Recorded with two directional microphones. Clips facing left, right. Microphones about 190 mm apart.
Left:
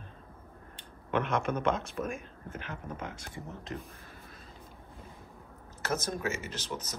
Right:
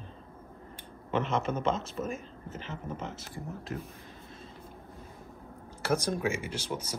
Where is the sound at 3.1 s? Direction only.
5° right (ahead or behind).